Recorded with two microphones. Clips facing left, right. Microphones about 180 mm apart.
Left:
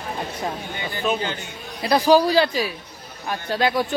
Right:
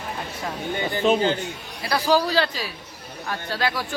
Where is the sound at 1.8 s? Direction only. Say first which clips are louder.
Left 5 dB; 20° left (ahead or behind).